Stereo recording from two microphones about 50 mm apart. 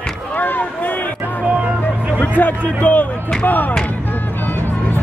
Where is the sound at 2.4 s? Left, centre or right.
Left.